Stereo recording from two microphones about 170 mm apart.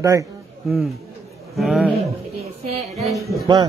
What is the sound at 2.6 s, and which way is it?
Speech, 35° right (ahead or behind).